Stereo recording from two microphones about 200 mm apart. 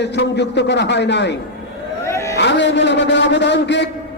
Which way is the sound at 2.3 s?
60° left (ahead or behind).